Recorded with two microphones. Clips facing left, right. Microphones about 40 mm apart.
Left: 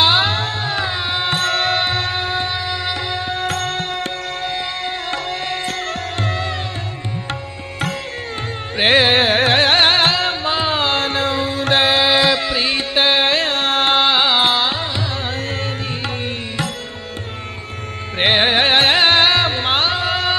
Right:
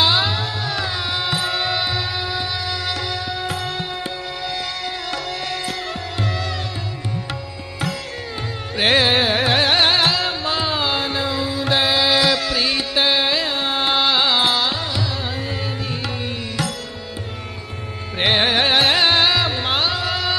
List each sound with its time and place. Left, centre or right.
0.0 s music: left
1.3 s music: left
2.7 s music: left
3.3 s music: left
4.5 s music: left
8.7 s carnatic music: left
9.0 s music: left
10.8 s music: left
18.2 s music: left